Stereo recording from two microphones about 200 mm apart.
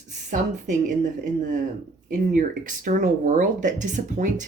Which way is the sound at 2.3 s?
40° right (ahead or behind).